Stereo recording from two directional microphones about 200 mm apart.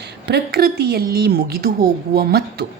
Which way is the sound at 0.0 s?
55° right (ahead or behind).